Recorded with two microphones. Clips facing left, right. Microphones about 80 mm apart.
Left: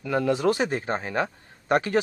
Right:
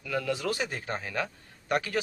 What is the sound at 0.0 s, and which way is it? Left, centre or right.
A man's voice, left.